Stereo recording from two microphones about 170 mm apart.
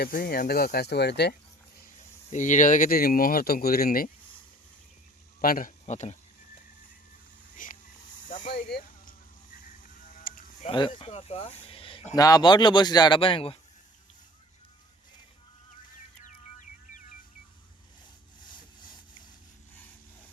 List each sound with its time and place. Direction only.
0.0 s speech: 65° left (ahead or behind)
2.3 s speech: 45° left (ahead or behind)
5.4 s speech: 55° left (ahead or behind)
5.8 s speech: 45° left (ahead or behind)
7.5 s vehicle: 50° left (ahead or behind)
8.7 s a sound: 55° left (ahead or behind)
9.8 s sheep: 55° left (ahead or behind)
10.7 s a man's voice: 30° left (ahead or behind)
16.2 s music: 50° left (ahead or behind)
18.4 s vehicle: 25° left (ahead or behind)